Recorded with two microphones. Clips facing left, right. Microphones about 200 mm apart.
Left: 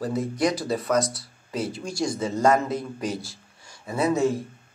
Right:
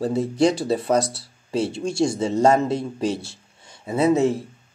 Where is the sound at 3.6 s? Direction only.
25° right (ahead or behind).